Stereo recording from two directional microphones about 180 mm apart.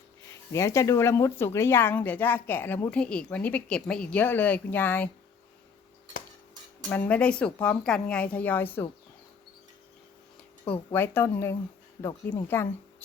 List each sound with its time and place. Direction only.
0.5 s a woman's voice: 15° left (ahead or behind)
6.9 s a woman's voice: 10° left (ahead or behind)
10.7 s a woman's voice: 10° left (ahead or behind)